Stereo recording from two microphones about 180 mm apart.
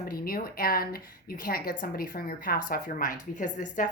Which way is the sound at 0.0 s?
55° left (ahead or behind).